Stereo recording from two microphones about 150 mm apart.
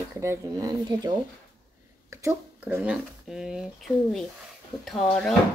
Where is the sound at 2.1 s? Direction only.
20° right (ahead or behind).